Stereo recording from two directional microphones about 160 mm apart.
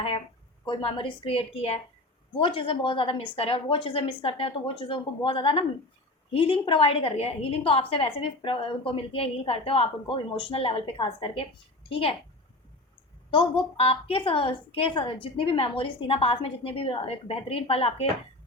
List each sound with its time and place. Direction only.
0.6 s a woman's voice: 35° left (ahead or behind)
13.3 s a woman's voice: 35° left (ahead or behind)